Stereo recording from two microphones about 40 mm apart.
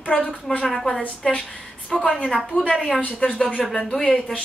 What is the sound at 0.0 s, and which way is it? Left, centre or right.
Speech, left.